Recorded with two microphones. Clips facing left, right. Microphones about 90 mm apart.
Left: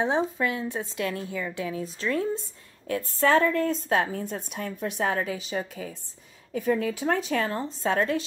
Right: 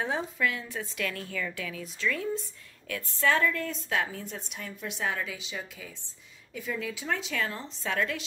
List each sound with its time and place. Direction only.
0.0 s a woman's voice: 30° left (ahead or behind)